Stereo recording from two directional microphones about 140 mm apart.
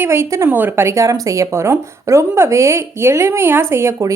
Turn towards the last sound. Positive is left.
turn(degrees=-20)  # may be behind; listen again after turning